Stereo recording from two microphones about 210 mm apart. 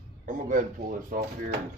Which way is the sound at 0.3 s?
40° right (ahead or behind).